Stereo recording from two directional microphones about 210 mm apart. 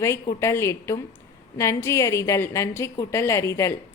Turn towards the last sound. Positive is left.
turn(degrees=15)  # may be behind; listen again after turning